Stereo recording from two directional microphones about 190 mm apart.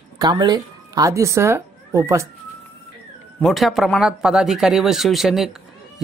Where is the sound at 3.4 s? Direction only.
Centre (ahead or behind).